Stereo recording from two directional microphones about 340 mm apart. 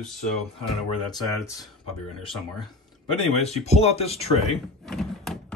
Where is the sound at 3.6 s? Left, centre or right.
Centre.